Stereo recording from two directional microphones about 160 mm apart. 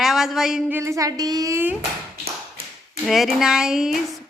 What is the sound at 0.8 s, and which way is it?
Speech, 20° right (ahead or behind).